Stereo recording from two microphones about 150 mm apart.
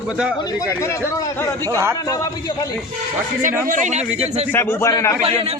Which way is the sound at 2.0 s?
25° left (ahead or behind).